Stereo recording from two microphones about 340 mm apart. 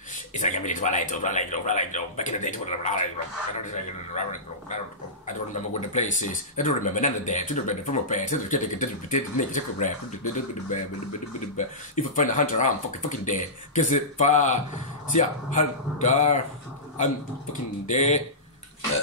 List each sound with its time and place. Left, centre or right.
0.3 s speech: left
11.5 s speech: left